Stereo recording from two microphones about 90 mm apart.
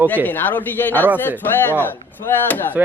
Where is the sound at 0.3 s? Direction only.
20° left (ahead or behind).